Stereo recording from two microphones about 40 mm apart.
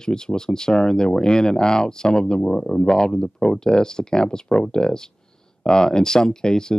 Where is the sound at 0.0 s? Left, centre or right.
Centre.